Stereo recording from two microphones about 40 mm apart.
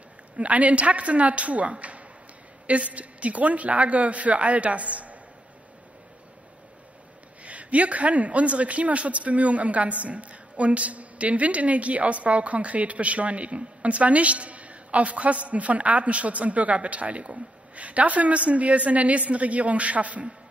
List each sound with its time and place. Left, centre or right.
0.4 s a man's voice: right
7.4 s a man's voice: right